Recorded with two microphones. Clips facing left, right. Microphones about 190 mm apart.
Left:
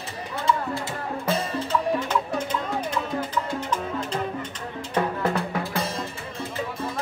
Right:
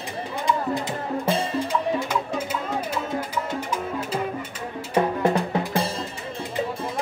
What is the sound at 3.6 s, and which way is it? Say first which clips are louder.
Music: even; 10° right (ahead or behind).